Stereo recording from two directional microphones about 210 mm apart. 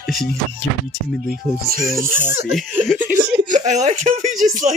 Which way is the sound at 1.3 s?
45° right (ahead or behind).